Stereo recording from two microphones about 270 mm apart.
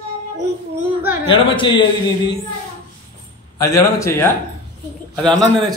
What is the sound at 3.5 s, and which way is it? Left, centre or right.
Speech, centre.